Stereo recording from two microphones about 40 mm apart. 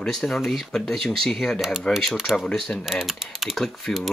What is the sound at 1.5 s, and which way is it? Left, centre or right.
Mechanisms, centre.